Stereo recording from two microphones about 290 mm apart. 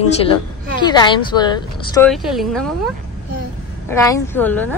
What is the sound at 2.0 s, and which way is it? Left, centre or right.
Speech, centre.